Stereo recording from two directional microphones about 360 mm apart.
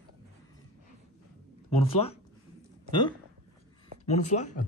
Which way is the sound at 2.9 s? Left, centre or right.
Centre.